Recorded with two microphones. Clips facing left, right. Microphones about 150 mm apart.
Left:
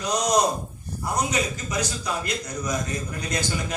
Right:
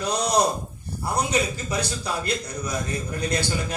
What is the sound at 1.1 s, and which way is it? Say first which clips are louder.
A man's voice: right 2 dB; 30° right (ahead or behind).